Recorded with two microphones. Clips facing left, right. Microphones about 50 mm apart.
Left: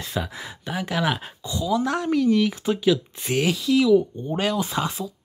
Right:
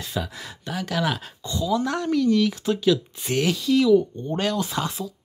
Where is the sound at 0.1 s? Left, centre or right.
Centre.